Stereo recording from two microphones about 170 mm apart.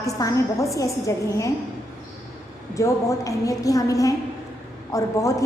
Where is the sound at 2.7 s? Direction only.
20° left (ahead or behind).